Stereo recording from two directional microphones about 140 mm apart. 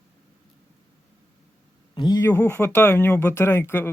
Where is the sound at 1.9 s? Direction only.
30° left (ahead or behind).